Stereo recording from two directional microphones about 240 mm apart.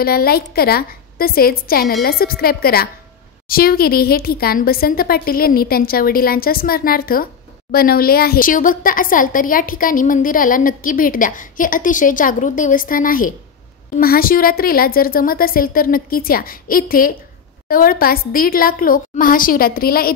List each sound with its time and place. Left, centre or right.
0.0 s a woman's voice: left